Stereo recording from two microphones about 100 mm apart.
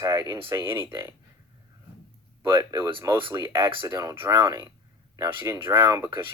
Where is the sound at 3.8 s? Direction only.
35° right (ahead or behind).